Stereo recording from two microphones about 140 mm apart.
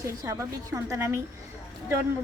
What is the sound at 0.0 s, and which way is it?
A woman's voice, 20° right (ahead or behind).